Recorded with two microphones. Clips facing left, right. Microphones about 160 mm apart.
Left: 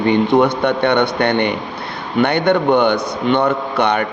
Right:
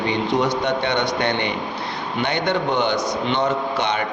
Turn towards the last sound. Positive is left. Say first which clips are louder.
# left 5 dB
turn(degrees=60)  # may be behind; listen again after turning